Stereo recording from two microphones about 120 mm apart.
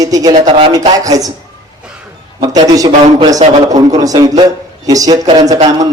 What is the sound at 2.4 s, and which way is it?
A man's voice, 30° right (ahead or behind).